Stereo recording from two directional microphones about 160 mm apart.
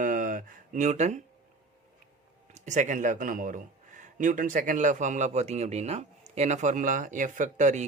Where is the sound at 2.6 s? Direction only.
50° right (ahead or behind).